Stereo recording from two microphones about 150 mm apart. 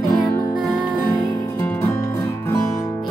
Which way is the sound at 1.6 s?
15° left (ahead or behind).